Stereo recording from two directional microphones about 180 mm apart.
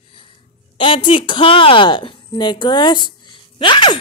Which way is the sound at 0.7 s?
30° left (ahead or behind).